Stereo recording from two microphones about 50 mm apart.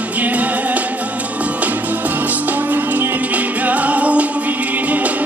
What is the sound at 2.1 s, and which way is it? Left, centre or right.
Music, right.